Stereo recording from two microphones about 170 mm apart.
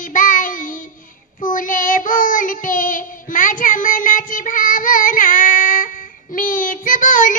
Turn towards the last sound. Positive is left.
turn(degrees=50)  # may be behind; listen again after turning